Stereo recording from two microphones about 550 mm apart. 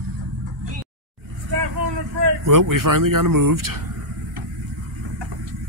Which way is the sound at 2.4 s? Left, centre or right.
Right.